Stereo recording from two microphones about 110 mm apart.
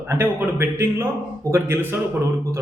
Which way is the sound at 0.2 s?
20° right (ahead or behind).